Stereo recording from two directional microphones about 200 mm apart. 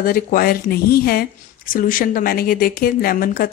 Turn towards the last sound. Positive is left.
turn(degrees=45)  # may be behind; listen again after turning